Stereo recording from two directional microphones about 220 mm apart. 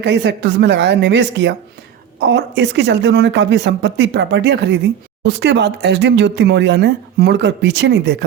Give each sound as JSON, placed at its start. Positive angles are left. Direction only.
{"t": 0.0, "sound": "speech", "side_deg": -50}